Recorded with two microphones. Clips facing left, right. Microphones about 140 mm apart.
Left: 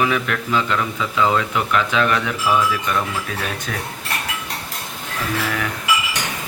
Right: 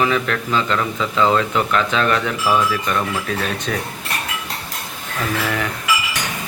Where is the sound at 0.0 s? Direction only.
10° left (ahead or behind).